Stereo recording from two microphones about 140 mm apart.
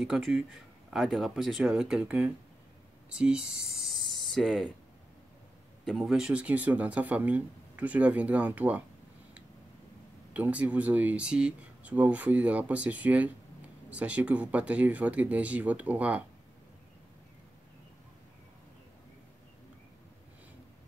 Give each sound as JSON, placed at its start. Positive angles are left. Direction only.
{"t": 0.0, "sound": "speech", "side_deg": -5}
{"t": 5.9, "sound": "speech", "side_deg": 0}
{"t": 10.3, "sound": "speech", "side_deg": -10}